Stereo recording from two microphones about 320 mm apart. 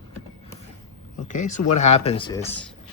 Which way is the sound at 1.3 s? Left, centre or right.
Left.